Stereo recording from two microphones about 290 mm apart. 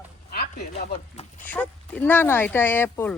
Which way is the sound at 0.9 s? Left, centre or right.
Left.